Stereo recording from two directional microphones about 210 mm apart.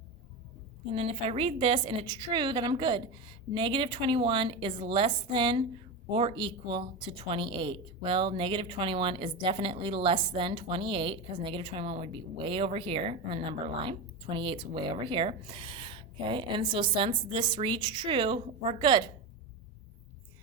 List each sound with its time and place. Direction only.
0.9 s a woman's voice: 30° right (ahead or behind)